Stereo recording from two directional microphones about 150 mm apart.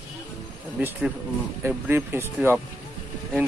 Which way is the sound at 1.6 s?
15° right (ahead or behind).